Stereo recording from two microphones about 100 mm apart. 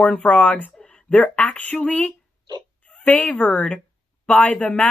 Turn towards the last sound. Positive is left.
turn(degrees=10)  # may be behind; listen again after turning